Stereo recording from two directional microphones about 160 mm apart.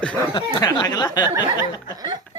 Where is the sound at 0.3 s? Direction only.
25° left (ahead or behind).